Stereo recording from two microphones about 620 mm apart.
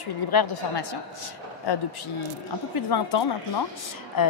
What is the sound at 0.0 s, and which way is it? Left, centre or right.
A woman's voice, left.